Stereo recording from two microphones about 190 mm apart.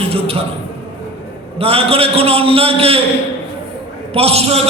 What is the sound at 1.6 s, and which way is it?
A man's voice, 30° right (ahead or behind).